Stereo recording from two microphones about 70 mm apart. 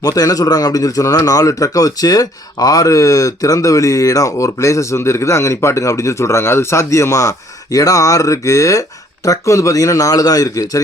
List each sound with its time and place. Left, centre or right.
0.0 s a man's voice: left